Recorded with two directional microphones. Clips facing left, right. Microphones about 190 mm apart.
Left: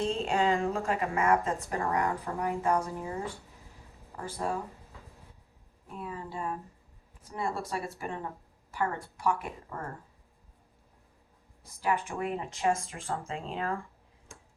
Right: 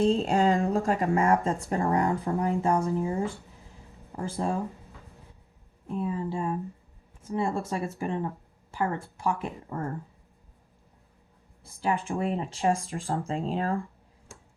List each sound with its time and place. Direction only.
0.0 s speech: 35° right (ahead or behind)
6.0 s speech: 25° right (ahead or behind)
11.8 s speech: 30° right (ahead or behind)